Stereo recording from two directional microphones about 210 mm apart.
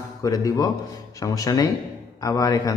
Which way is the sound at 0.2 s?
15° left (ahead or behind).